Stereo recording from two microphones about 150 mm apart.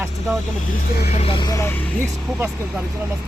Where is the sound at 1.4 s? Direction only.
25° left (ahead or behind).